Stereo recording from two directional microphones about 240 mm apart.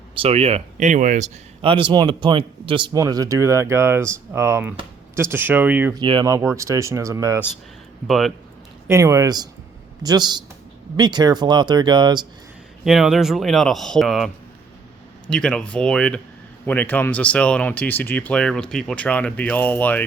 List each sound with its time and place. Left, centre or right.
0.1 s speech: right; by 6.0 s centre
6.0 s speech: centre
8.0 s speech: centre
8.9 s speech: centre
12.8 s speech: centre
15.3 s speech: centre